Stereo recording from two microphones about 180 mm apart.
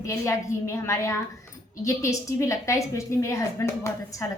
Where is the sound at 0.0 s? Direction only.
15° left (ahead or behind).